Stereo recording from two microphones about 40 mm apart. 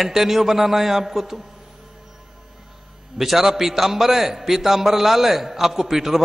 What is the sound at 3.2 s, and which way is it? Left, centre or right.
A man's voice, centre.